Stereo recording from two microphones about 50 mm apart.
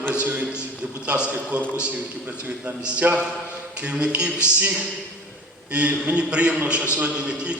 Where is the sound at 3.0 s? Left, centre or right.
Right.